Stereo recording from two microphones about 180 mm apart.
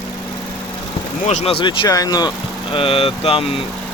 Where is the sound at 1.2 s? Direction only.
35° left (ahead or behind).